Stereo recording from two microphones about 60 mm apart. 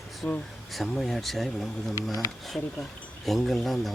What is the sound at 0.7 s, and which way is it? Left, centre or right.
Speech, centre.